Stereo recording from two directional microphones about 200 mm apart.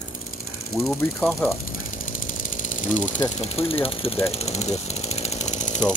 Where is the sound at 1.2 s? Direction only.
Centre (ahead or behind).